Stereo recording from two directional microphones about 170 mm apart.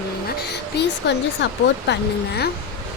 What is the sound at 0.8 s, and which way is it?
Speech, 80° left.